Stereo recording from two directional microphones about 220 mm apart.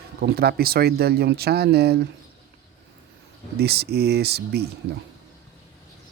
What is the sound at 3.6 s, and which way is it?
Speech, 45° right (ahead or behind).